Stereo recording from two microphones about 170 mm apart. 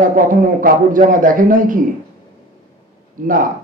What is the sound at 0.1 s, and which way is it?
Speech, 50° right (ahead or behind).